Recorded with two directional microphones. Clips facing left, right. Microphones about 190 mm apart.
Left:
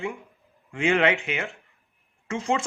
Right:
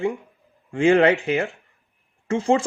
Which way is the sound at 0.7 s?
35° right (ahead or behind).